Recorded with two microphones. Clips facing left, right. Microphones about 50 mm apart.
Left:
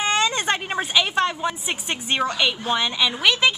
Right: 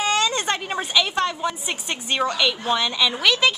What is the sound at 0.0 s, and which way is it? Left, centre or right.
A woman's voice, left.